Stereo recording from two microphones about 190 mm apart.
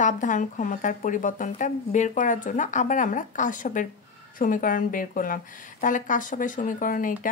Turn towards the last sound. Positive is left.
turn(degrees=45)  # may be behind; listen again after turning